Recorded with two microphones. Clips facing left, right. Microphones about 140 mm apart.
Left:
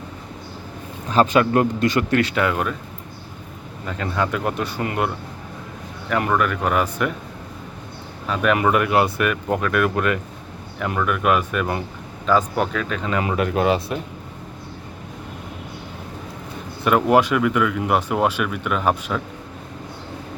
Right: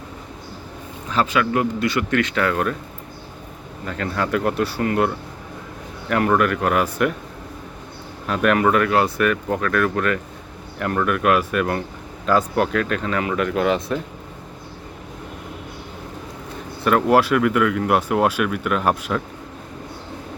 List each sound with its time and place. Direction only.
1.1 s a man's voice: 40° left (ahead or behind)
2.3 s speech: 10° left (ahead or behind)
3.8 s speech: 5° left (ahead or behind)
6.1 s speech: centre (ahead or behind)
8.3 s speech: centre (ahead or behind)
8.5 s speech: 10° left (ahead or behind)
10.8 s speech: centre (ahead or behind)
13.1 s speech: 20° left (ahead or behind)
16.8 s speech: centre (ahead or behind)